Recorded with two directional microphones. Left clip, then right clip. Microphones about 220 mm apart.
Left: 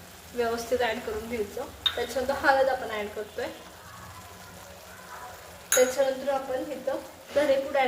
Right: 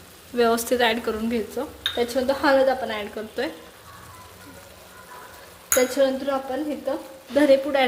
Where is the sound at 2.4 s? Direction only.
45° right (ahead or behind).